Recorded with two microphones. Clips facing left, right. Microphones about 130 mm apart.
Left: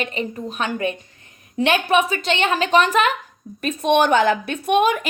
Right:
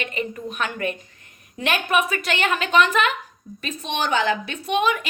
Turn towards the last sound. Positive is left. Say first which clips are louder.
# left 4 dB
turn(degrees=45)  # may be behind; listen again after turning